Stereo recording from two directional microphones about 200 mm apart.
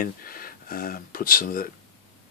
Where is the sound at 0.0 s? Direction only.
45° left (ahead or behind).